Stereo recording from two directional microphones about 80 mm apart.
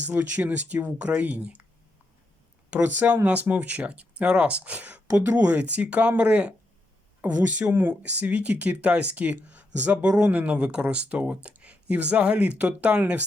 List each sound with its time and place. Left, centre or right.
0.0 s speech: centre
2.8 s speech: right